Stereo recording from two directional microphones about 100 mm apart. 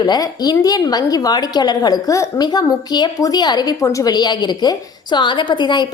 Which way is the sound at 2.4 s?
40° left (ahead or behind).